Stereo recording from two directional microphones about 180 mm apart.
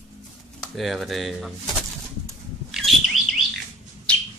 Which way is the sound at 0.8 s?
Centre (ahead or behind).